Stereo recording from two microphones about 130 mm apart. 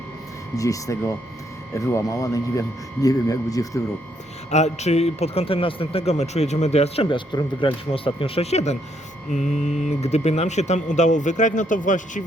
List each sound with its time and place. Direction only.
0.5 s speech: 25° left (ahead or behind)
4.5 s speech: 60° left (ahead or behind); by 12.2 s 75° left (ahead or behind)